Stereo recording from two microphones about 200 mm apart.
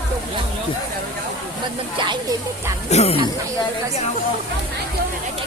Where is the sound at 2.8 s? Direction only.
30° left (ahead or behind).